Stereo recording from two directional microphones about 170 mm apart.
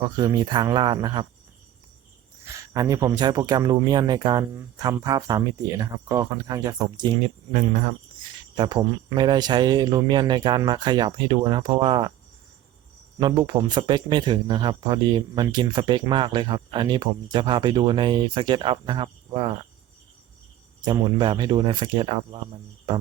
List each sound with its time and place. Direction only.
0.0 s speech: 25° right (ahead or behind)
2.6 s speech: 20° right (ahead or behind)
7.5 s speech: 45° right (ahead or behind)
8.5 s speech: 25° right (ahead or behind)
13.1 s speech: 25° right (ahead or behind)
20.8 s speech: 25° right (ahead or behind)